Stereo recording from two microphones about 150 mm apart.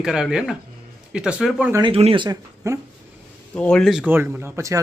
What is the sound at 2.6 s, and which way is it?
Speech, 20° right (ahead or behind).